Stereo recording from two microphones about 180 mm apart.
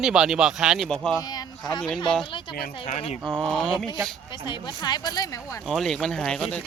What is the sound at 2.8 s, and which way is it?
Speech, 40° left (ahead or behind).